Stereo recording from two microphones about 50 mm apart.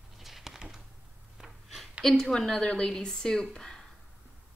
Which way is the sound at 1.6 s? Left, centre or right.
Centre.